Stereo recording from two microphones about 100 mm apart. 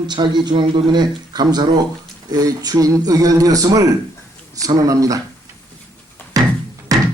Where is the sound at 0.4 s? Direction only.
50° right (ahead or behind).